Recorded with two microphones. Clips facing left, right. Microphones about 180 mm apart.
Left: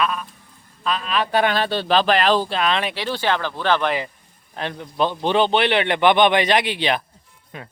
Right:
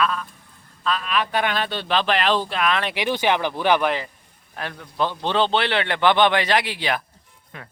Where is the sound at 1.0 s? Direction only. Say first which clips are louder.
Left 5 dB; 30° left (ahead or behind).